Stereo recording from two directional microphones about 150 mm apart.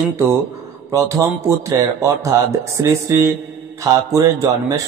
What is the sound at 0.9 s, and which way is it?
Speech, 20° right (ahead or behind).